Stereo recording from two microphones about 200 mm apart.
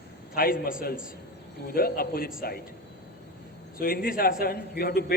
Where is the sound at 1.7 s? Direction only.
45° left (ahead or behind).